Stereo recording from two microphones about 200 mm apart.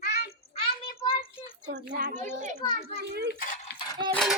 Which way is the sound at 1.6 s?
40° right (ahead or behind).